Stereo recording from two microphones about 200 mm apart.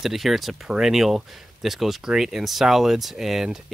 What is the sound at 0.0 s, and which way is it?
Speech, centre (ahead or behind).